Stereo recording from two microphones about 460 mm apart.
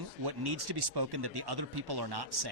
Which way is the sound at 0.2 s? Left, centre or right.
Right.